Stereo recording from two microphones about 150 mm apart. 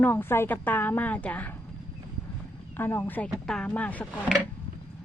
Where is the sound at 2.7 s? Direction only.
15° left (ahead or behind).